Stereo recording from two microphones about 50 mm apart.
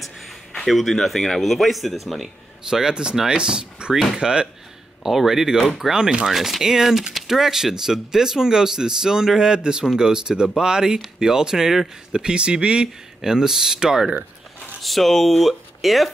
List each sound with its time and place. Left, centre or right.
0.7 s speech: centre
2.7 s speech: centre
6.2 s speech: centre
14.8 s speech: centre